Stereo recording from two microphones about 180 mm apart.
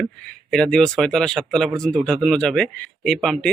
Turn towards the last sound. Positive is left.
turn(degrees=0)  # may be behind; listen again after turning